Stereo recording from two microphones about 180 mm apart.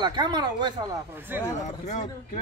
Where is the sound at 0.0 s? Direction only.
25° right (ahead or behind).